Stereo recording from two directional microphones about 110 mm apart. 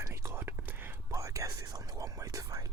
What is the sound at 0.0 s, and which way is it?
Whispering, 25° right (ahead or behind).